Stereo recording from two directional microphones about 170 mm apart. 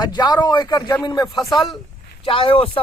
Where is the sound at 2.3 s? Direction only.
30° left (ahead or behind).